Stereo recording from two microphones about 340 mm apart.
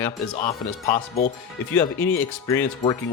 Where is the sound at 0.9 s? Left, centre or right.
Left.